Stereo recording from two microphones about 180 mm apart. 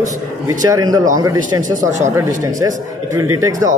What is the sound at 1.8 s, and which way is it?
Speech, 40° right (ahead or behind).